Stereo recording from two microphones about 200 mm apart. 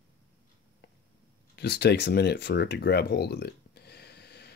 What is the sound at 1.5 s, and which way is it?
Speech, 55° left (ahead or behind).